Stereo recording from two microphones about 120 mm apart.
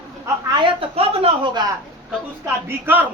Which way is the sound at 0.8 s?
50° right (ahead or behind).